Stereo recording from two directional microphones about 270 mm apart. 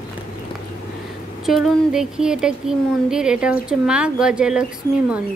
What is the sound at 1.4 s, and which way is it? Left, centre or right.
A child's voice, centre.